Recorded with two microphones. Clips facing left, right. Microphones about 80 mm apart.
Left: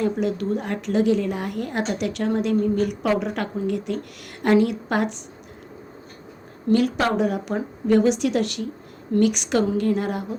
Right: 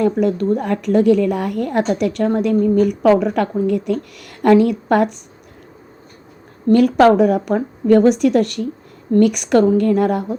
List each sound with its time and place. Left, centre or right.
0.0 s a woman's voice: right
6.7 s a woman's voice: right